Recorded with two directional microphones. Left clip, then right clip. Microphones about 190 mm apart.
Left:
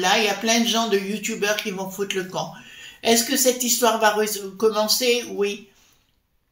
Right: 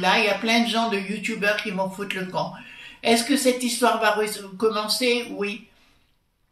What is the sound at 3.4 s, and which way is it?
Speech, 45° left (ahead or behind).